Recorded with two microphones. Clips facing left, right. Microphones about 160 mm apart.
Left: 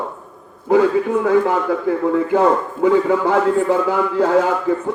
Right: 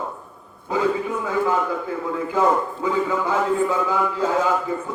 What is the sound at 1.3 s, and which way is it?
A man's voice, 60° left (ahead or behind).